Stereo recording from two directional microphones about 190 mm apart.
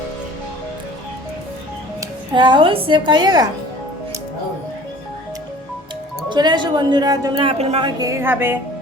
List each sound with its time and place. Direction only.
2.0 s speech: 25° right (ahead or behind)
6.2 s a woman's voice: 25° right (ahead or behind)